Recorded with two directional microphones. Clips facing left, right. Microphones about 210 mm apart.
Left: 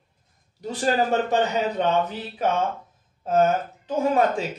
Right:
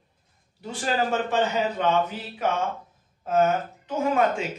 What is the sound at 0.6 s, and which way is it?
Speech, 40° left (ahead or behind).